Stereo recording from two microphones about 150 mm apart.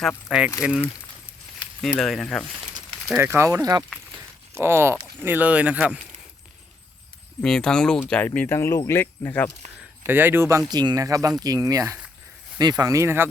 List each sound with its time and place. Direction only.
0.3 s speech: 5° right (ahead or behind)
3.2 s speech: 15° right (ahead or behind)
7.4 s speech: 5° left (ahead or behind)
10.0 s speech: 15° right (ahead or behind)
10.7 s speech: 30° right (ahead or behind)